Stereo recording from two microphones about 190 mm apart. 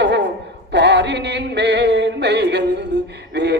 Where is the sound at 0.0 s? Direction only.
65° right (ahead or behind).